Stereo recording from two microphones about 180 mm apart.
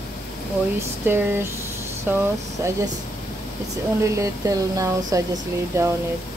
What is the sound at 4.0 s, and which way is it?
Speech, 15° right (ahead or behind).